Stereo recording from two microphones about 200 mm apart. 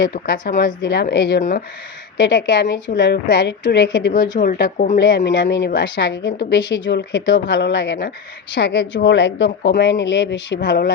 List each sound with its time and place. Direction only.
0.0 s a woman's voice: 55° left (ahead or behind)
4.4 s speech: 50° left (ahead or behind)
4.9 s a woman's voice: 60° left (ahead or behind)